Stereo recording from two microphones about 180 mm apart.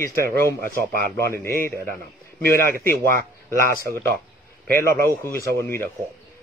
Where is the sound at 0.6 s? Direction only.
55° right (ahead or behind).